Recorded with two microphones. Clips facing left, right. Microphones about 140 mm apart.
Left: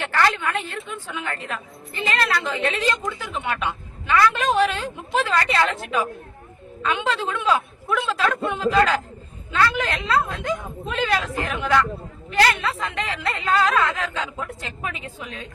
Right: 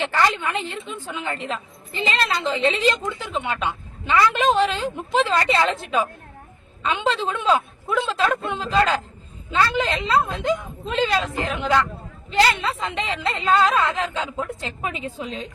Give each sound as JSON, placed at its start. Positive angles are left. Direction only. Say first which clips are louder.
{"t": 0.0, "sound": "a woman's voice", "louder": "even", "side_deg": -20}